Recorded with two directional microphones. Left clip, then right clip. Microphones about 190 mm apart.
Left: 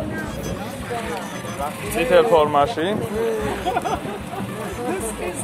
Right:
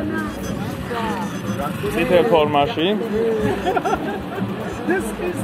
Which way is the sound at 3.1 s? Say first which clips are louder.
Right 3 dB; centre (ahead or behind).